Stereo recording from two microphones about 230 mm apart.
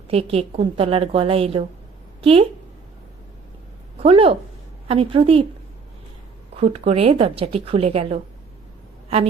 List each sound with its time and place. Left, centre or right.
0.1 s a woman's voice: right
4.0 s a woman's voice: right
6.5 s a woman's voice: right